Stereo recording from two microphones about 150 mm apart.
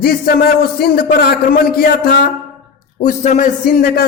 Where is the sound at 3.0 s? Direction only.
55° left (ahead or behind); by 4.0 s 85° left.